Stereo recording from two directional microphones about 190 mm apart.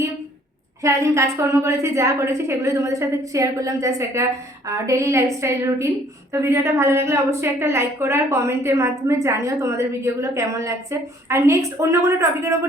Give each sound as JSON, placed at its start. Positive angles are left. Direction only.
{"t": 0.8, "sound": "a woman's voice", "side_deg": -15}